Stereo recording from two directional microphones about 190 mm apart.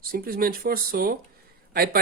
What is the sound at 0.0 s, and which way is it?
Speech, 50° right (ahead or behind).